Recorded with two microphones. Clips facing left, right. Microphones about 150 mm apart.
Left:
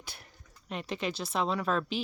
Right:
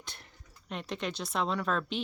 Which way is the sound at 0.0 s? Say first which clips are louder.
Even; 5° left (ahead or behind).